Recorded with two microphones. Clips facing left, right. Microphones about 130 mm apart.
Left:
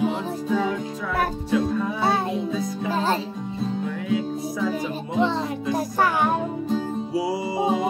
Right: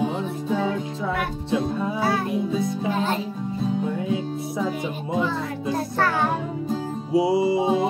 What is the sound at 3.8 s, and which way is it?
Music, 25° right (ahead or behind).